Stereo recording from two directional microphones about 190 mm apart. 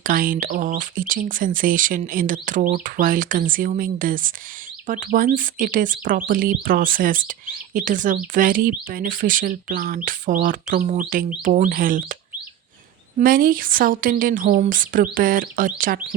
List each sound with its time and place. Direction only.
0.0 s speech: 45° right (ahead or behind)
13.1 s speech: 45° right (ahead or behind)